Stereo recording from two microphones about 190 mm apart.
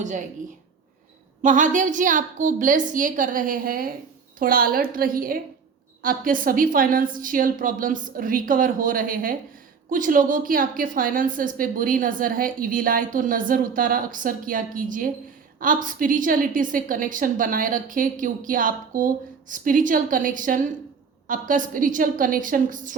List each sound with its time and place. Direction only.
1.4 s a woman's voice: 40° right (ahead or behind)